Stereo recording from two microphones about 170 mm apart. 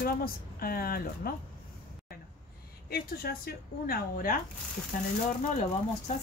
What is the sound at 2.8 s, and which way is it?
Speech, 65° left (ahead or behind).